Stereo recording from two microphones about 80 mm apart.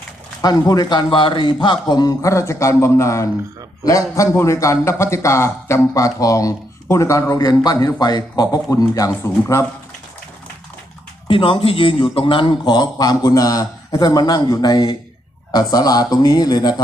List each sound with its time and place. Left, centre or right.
0.4 s a man's voice: left
7.4 s a man's voice: left
11.3 s a man's voice: left